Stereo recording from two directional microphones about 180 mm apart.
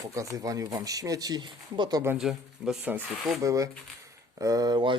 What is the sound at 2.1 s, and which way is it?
Speech, centre (ahead or behind).